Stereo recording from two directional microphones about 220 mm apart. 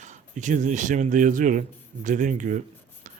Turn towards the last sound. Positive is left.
turn(degrees=-35)  # may be behind; listen again after turning